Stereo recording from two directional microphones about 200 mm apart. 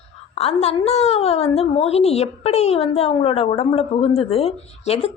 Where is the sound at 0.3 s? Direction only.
30° left (ahead or behind).